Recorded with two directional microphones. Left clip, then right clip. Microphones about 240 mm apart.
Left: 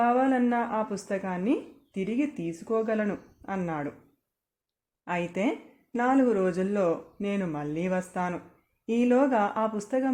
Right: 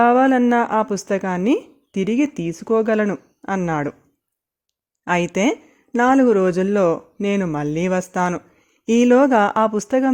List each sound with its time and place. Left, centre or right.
0.0 s speech: right
5.0 s speech: right